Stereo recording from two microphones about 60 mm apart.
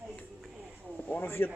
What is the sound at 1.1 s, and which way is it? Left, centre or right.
Speech, left.